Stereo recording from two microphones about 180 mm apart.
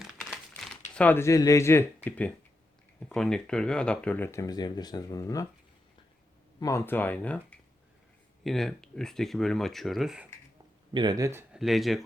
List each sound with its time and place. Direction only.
0.2 s crumpling: centre (ahead or behind)
0.9 s speech: 10° left (ahead or behind)
6.6 s speech: 15° left (ahead or behind); by 10.2 s centre (ahead or behind)
10.9 s speech: 20° right (ahead or behind)
11.6 s speech: centre (ahead or behind)